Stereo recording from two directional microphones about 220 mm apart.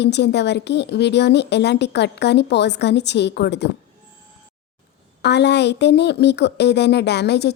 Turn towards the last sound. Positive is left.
turn(degrees=50)  # may be behind; listen again after turning